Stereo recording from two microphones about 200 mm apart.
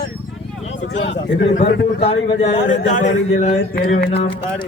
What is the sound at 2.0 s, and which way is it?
Speech, 30° left (ahead or behind).